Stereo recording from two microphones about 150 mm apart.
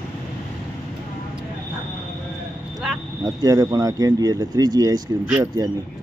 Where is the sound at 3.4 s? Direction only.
25° right (ahead or behind).